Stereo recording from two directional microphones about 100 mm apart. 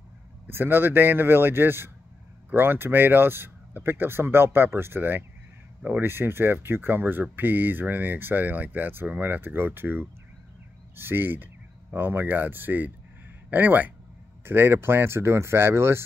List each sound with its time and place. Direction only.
0.5 s speech: 20° right (ahead or behind)